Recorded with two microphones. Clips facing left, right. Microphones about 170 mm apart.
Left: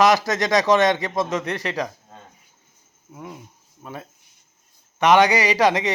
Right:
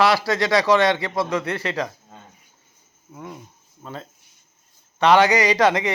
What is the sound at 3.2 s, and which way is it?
A man's voice, 15° left (ahead or behind).